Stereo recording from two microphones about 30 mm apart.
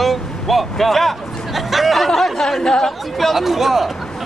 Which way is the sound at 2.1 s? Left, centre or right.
Centre.